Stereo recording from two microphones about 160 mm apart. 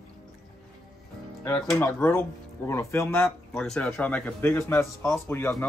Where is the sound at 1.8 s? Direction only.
15° left (ahead or behind).